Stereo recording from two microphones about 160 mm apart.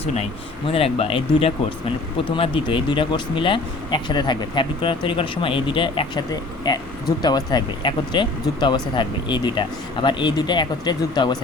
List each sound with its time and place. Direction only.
0.7 s speech: 35° left (ahead or behind)